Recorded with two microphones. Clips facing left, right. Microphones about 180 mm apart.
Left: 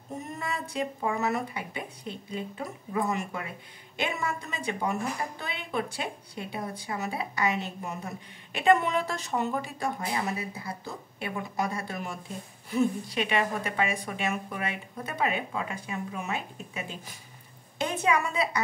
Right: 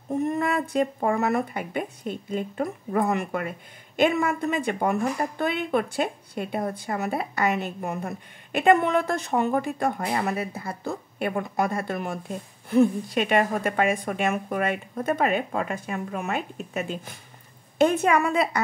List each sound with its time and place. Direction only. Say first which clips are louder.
0.2 s a woman's voice: right 11 dB; 60° right (ahead or behind)